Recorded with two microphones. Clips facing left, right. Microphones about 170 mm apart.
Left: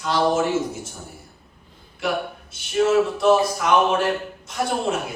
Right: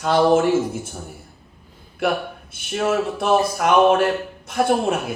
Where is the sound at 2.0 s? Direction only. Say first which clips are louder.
Right 3 dB; 55° right (ahead or behind).